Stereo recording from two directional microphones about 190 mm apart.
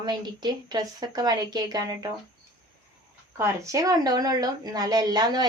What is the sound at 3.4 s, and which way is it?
Speech, 15° right (ahead or behind).